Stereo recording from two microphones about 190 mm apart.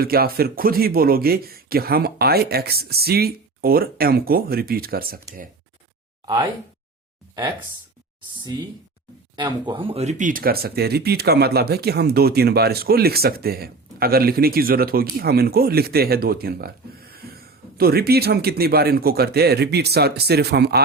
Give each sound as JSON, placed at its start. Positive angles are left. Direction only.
{"t": 0.0, "sound": "speech", "side_deg": -50}
{"t": 6.2, "sound": "speech", "side_deg": -25}
{"t": 9.3, "sound": "speech", "side_deg": -25}